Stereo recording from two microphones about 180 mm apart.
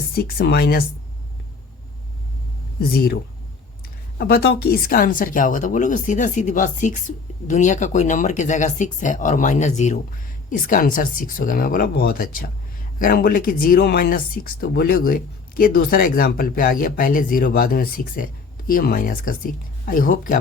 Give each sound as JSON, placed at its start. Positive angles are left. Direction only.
{"t": 0.1, "sound": "speech", "side_deg": 55}
{"t": 2.9, "sound": "speech", "side_deg": 60}